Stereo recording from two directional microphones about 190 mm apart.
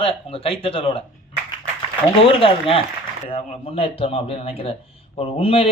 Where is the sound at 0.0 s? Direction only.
30° left (ahead or behind).